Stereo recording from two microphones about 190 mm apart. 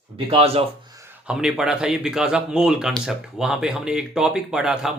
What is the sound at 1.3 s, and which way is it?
Speech, 5° right (ahead or behind).